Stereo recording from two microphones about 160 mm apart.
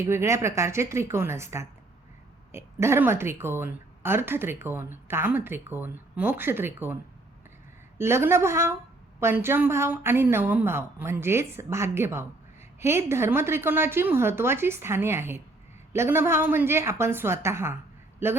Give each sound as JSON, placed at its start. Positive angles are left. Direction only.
{"t": 0.0, "sound": "speech", "side_deg": -15}
{"t": 7.9, "sound": "speech", "side_deg": -15}